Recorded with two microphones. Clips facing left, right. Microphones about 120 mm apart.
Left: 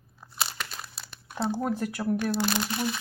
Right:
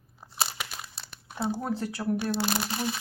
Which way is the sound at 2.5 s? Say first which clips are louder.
Left 1 dB; 35° right (ahead or behind).